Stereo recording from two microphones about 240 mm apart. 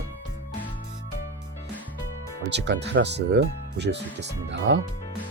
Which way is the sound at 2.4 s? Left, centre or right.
Right.